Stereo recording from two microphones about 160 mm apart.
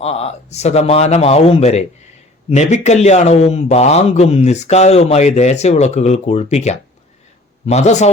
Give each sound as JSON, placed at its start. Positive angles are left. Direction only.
{"t": 0.0, "sound": "a man's voice", "side_deg": 40}